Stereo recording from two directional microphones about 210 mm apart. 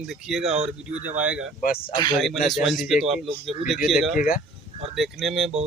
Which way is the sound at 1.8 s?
20° left (ahead or behind).